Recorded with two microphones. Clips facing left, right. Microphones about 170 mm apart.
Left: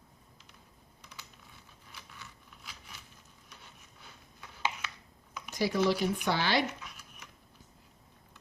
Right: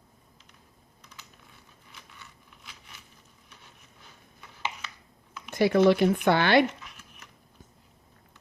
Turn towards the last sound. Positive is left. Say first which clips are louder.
# right 8 dB
turn(degrees=-60)  # may be behind; listen again after turning